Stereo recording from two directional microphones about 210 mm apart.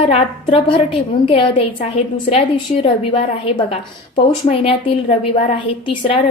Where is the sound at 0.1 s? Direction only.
25° left (ahead or behind).